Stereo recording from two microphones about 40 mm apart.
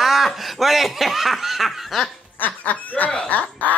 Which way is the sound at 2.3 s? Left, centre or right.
Left.